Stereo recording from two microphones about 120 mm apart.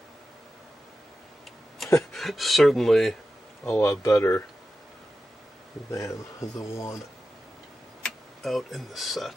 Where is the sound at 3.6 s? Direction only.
20° left (ahead or behind).